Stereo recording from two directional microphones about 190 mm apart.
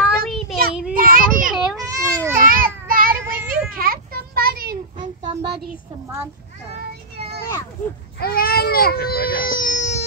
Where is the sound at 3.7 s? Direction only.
50° right (ahead or behind).